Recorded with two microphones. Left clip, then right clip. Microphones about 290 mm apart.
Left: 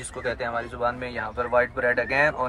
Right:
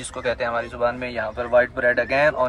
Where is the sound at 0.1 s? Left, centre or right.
Centre.